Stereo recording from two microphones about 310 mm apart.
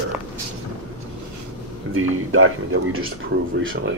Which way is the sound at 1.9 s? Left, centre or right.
Right.